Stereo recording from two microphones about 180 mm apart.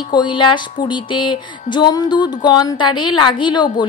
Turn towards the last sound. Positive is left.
turn(degrees=25)  # may be behind; listen again after turning